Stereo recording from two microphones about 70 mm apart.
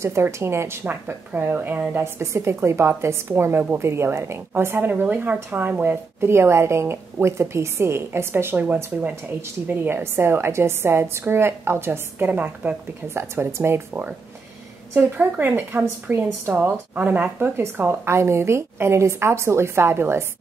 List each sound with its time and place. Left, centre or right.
0.0 s a woman's voice: right
2.1 s a woman's voice: right
6.3 s a woman's voice: right
13.1 s a woman's voice: right
15.0 s a woman's voice: right
16.9 s a woman's voice: right